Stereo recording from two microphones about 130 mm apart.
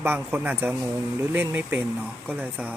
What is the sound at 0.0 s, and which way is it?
A man's voice, 15° right (ahead or behind).